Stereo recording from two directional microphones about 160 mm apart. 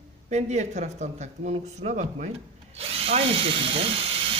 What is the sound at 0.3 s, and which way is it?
Speech, 45° right (ahead or behind).